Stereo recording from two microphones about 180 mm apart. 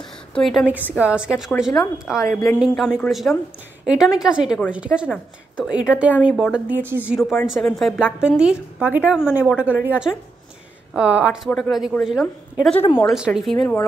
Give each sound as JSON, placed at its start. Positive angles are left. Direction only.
{"t": 0.0, "sound": "a woman's voice", "side_deg": 0}
{"t": 2.1, "sound": "speech", "side_deg": 15}
{"t": 2.6, "sound": "a woman's voice", "side_deg": 0}